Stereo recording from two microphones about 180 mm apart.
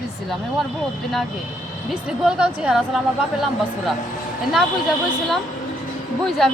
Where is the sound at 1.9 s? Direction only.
5° right (ahead or behind).